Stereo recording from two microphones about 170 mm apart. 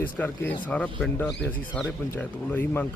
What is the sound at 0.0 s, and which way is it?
Speech, 10° left (ahead or behind).